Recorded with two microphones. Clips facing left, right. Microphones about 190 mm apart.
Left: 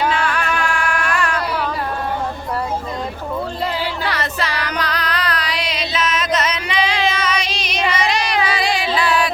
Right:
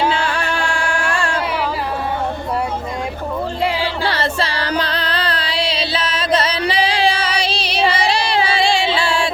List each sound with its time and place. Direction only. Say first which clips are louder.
0.0 s music: right 1 dB; 30° right (ahead or behind)
4.0 s music: right 3 dB; 30° right (ahead or behind)